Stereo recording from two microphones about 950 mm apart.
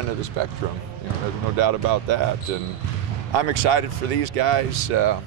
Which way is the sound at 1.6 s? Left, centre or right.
Right.